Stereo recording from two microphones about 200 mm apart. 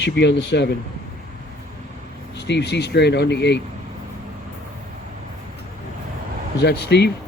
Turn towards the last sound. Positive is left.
turn(degrees=55)  # may be behind; listen again after turning